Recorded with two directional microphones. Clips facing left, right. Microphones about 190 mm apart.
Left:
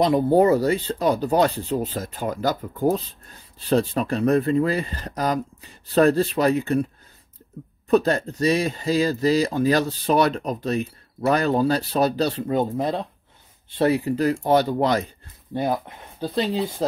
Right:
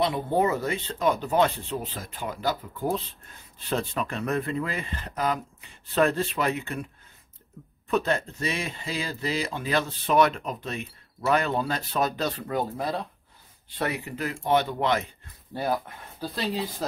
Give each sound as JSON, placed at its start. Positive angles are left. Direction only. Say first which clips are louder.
{"t": 0.0, "sound": "speech", "louder": "left 7 dB", "side_deg": 40}
{"t": 7.9, "sound": "speech", "louder": "left 7 dB", "side_deg": 40}
{"t": 15.5, "sound": "speech", "louder": "left 4 dB", "side_deg": 20}